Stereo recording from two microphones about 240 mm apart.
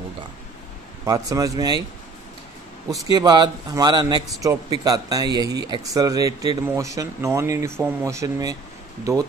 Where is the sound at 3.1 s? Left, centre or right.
Centre.